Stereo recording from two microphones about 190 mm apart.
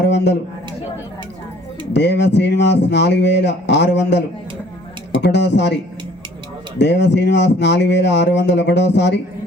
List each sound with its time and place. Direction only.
0.0 s a man's voice: 65° left (ahead or behind)
1.9 s speech: 65° left (ahead or behind)
5.2 s speech: 65° left (ahead or behind)
6.7 s speech: 65° left (ahead or behind)